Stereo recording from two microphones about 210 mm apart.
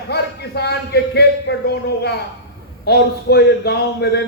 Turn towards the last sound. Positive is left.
turn(degrees=50)  # may be behind; listen again after turning